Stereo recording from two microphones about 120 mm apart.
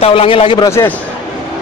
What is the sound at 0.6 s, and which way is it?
Speech, 20° left (ahead or behind).